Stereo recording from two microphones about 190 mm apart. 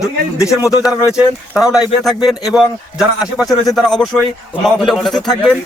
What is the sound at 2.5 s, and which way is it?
A man's voice, centre (ahead or behind).